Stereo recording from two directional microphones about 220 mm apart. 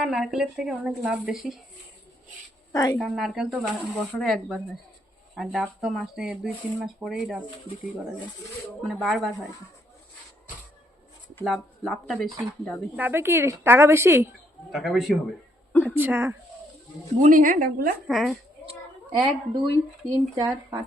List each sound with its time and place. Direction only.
0.0 s speech: centre (ahead or behind)
2.7 s a woman's voice: 15° left (ahead or behind)
3.0 s speech: centre (ahead or behind)
8.8 s speech: centre (ahead or behind)
11.3 s speech: centre (ahead or behind)
14.7 s speech: centre (ahead or behind)
17.2 s a woman's voice: 35° right (ahead or behind)
18.1 s speech: centre (ahead or behind)
19.1 s speech: 15° right (ahead or behind)